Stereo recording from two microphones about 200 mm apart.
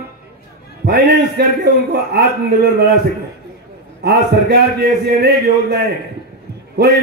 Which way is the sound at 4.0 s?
50° right (ahead or behind).